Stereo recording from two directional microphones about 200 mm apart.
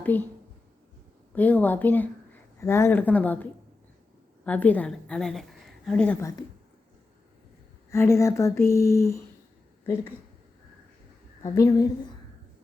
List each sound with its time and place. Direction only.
0.0 s a woman's voice: 10° left (ahead or behind)
1.3 s speech: 10° left (ahead or behind)
4.4 s a woman's voice: 5° left (ahead or behind)
7.9 s speech: 15° left (ahead or behind)
11.4 s speech: 15° left (ahead or behind)